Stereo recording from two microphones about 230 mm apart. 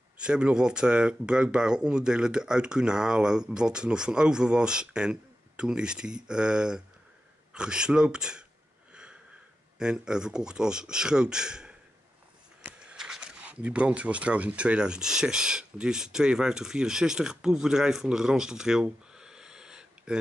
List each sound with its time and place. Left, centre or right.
0.2 s speech: centre
8.9 s sniff: centre
9.8 s speech: centre